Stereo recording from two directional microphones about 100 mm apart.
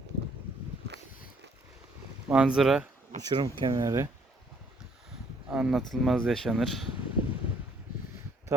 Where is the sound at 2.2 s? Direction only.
10° right (ahead or behind).